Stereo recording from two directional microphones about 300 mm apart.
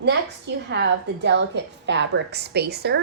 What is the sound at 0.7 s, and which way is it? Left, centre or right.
A woman's voice, right.